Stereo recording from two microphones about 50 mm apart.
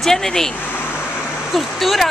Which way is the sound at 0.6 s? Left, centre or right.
Left.